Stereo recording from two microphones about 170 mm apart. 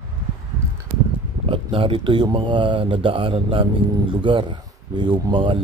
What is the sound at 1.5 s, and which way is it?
Speech, 30° right (ahead or behind).